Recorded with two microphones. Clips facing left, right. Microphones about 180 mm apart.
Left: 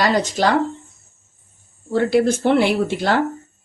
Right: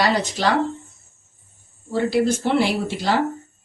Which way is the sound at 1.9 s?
55° left (ahead or behind).